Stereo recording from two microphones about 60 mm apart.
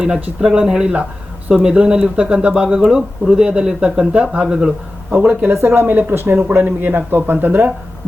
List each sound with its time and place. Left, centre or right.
0.0 s speech: centre
5.1 s speech: right
5.5 s speech: right